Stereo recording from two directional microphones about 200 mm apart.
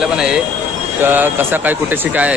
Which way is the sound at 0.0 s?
5° right (ahead or behind).